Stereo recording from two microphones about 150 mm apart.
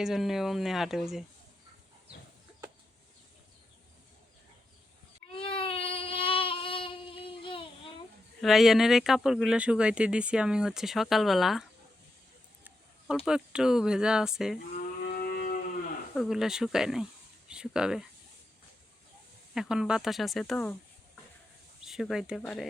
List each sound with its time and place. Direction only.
0.0 s speech: centre (ahead or behind)
5.4 s a sound: 35° left (ahead or behind)
8.4 s speech: centre (ahead or behind)
13.2 s speech: 5° right (ahead or behind)
14.8 s moo: 85° left
16.1 s speech: centre (ahead or behind)
19.5 s speech: 5° right (ahead or behind)
21.8 s speech: 5° right (ahead or behind)